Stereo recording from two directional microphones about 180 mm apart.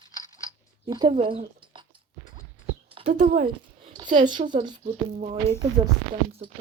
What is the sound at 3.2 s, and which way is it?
A woman's voice, 35° right (ahead or behind).